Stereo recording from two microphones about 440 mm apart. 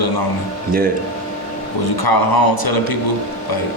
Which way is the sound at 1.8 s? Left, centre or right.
Left.